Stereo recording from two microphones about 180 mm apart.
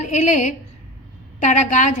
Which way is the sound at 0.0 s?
40° left (ahead or behind).